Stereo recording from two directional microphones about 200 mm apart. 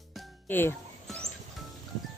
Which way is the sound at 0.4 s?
10° left (ahead or behind).